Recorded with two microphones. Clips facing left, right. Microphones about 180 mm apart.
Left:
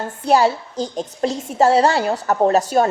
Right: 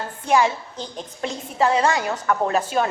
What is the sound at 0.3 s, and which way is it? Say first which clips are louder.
A woman's voice: left 4 dB; 35° left (ahead or behind).